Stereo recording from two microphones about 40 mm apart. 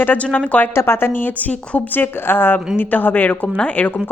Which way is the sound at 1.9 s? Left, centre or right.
Left.